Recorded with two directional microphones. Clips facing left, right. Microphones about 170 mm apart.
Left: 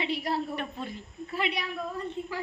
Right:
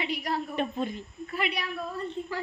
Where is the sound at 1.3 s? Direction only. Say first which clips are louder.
Even; 25° left (ahead or behind).